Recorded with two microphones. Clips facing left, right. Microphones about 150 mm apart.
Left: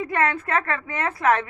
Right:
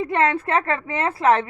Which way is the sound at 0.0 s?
30° right (ahead or behind).